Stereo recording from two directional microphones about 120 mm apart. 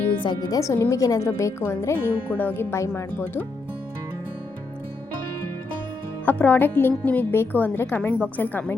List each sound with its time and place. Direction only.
0.2 s speech: 40° left (ahead or behind)
0.6 s a woman's voice: 25° left (ahead or behind)
6.2 s a woman's voice: 15° left (ahead or behind)